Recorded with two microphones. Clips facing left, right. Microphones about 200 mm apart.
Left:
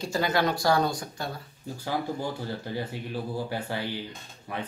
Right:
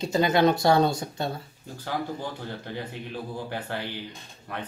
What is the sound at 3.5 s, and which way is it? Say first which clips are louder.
Speech: left 1 dB; 10° left (ahead or behind).